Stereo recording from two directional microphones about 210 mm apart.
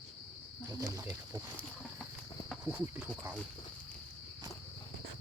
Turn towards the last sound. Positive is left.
turn(degrees=-5)  # may be behind; listen again after turning